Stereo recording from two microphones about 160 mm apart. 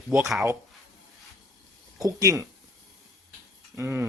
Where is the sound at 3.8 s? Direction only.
15° right (ahead or behind).